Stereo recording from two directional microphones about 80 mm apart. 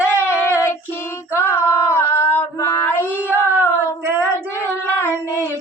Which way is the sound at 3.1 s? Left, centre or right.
Right.